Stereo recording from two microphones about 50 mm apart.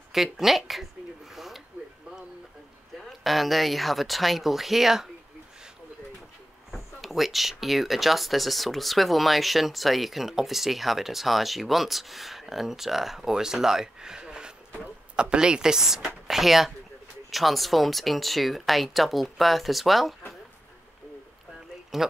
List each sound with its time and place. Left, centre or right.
0.1 s speech: centre
1.3 s a sound: centre
3.0 s speech: centre
6.7 s speech: centre
21.9 s speech: centre